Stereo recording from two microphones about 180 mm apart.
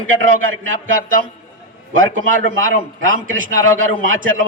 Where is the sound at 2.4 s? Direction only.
90° right.